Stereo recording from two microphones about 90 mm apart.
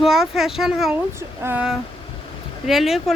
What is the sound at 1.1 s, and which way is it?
Speech, 30° right (ahead or behind).